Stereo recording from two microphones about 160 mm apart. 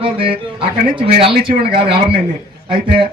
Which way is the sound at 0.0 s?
35° right (ahead or behind).